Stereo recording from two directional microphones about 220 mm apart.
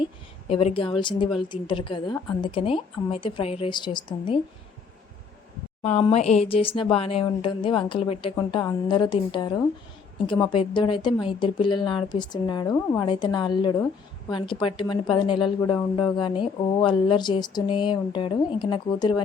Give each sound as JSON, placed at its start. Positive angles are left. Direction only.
{"t": 0.0, "sound": "a woman's voice", "side_deg": 25}
{"t": 5.8, "sound": "a woman's voice", "side_deg": 25}